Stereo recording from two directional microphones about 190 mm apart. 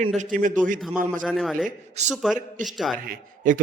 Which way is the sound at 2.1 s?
Centre (ahead or behind).